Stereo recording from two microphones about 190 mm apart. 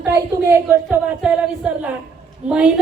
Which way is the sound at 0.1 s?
15° right (ahead or behind).